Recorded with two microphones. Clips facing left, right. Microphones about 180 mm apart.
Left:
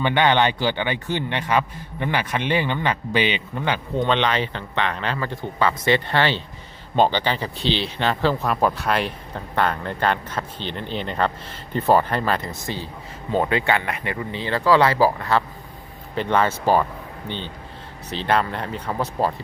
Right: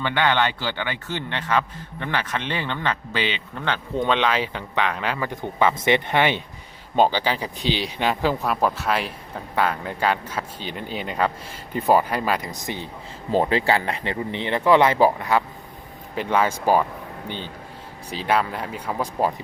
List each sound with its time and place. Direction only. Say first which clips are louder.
0.0 s a man's voice: left 3 dB; 20° left (ahead or behind)
3.9 s speech: even; centre (ahead or behind)
6.9 s speech: even; 5° right (ahead or behind)
13.3 s speech: right 1 dB; 30° right (ahead or behind); by 19.3 s 10° right (ahead or behind)